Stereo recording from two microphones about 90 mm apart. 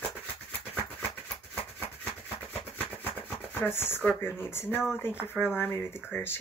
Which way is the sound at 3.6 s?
25° left (ahead or behind).